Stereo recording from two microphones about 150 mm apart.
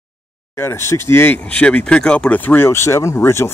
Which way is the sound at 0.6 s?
15° left (ahead or behind).